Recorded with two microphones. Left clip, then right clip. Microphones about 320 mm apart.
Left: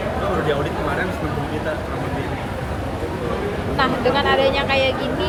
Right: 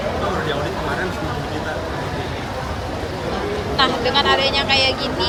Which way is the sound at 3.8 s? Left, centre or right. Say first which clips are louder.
Right 1 dB; centre.